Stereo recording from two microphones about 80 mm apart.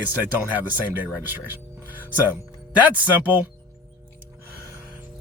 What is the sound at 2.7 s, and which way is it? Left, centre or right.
Speech, centre.